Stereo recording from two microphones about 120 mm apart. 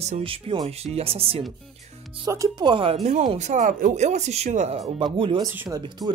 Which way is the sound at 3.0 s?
85° right.